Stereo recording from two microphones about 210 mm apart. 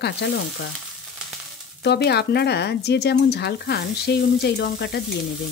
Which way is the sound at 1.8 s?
50° left (ahead or behind).